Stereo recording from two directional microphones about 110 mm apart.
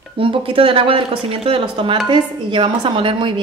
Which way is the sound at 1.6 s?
45° right (ahead or behind).